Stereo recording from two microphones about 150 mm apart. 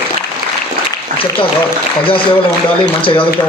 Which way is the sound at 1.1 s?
55° right (ahead or behind).